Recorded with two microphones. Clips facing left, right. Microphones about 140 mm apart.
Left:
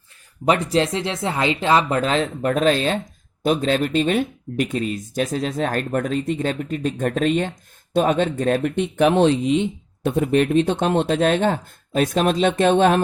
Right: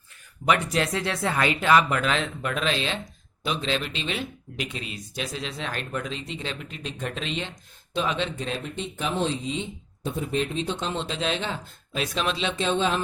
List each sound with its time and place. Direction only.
0.4 s speech: 35° left (ahead or behind); by 13.0 s 60° left (ahead or behind)